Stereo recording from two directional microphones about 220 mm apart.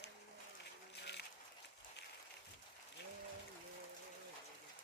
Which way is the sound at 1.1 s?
50° left (ahead or behind).